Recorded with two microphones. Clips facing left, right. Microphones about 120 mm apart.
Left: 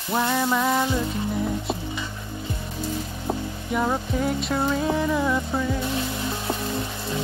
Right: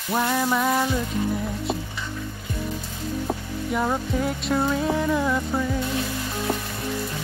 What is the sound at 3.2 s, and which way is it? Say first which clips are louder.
Music: even; centre (ahead or behind).